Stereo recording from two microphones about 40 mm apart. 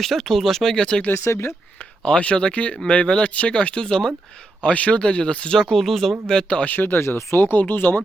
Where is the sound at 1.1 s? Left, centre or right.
Left.